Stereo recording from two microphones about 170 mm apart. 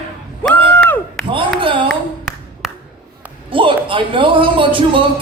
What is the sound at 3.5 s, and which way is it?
A man's voice, 30° right (ahead or behind).